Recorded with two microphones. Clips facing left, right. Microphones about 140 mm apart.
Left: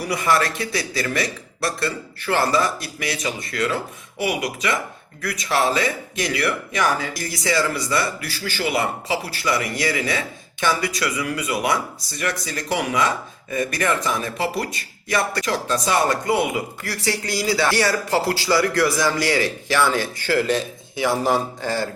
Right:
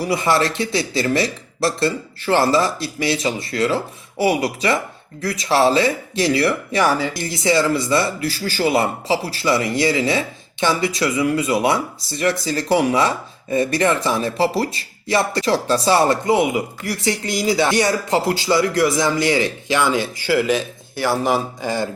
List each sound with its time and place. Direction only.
0.0 s a man's voice: 25° right (ahead or behind); by 21.4 s centre (ahead or behind)
21.6 s speech: 15° right (ahead or behind)